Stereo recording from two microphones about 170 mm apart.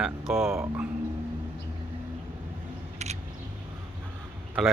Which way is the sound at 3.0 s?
40° right (ahead or behind).